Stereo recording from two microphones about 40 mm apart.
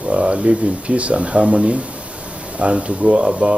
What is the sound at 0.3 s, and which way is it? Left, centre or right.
Speech, right.